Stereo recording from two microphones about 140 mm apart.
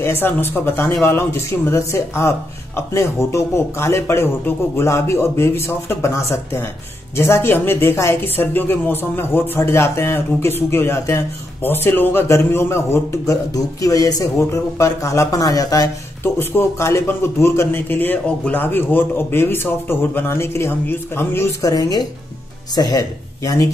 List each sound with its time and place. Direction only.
0.0 s a woman's voice: 15° left (ahead or behind)